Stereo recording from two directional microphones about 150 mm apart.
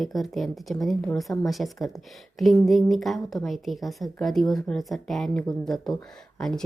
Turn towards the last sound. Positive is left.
turn(degrees=5)  # may be behind; listen again after turning